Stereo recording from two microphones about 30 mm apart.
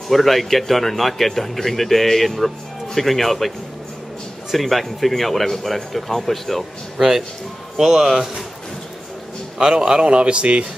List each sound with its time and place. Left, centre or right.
0.1 s speech: centre
7.0 s speech: centre
9.7 s a man's voice: right
10.0 s speech: right